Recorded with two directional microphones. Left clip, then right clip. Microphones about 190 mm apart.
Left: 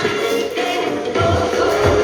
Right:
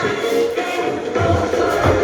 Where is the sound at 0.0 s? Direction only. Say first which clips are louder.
Right 1 dB; 45° left (ahead or behind).